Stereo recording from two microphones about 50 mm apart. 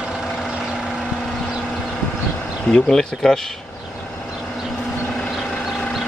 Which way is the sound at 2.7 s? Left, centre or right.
Centre.